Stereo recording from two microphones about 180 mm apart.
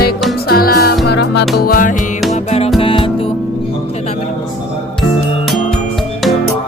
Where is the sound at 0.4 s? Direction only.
55° left (ahead or behind).